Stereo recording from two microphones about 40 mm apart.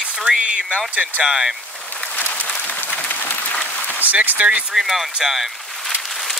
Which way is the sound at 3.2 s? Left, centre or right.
Left.